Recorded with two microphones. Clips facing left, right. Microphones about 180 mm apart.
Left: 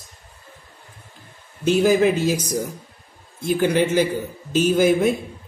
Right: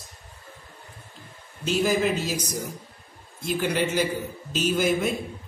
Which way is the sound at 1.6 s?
50° left (ahead or behind).